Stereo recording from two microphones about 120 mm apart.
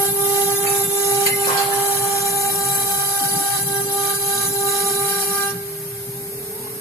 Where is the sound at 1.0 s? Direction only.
25° left (ahead or behind).